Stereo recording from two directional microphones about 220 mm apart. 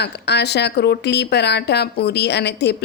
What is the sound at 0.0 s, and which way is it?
Speech, 50° left (ahead or behind).